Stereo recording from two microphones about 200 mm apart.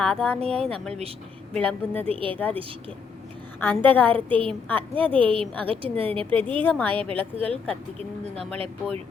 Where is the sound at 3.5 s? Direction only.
10° left (ahead or behind).